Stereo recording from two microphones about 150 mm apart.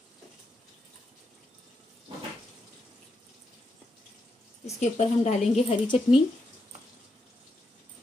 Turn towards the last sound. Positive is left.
turn(degrees=35)  # may be behind; listen again after turning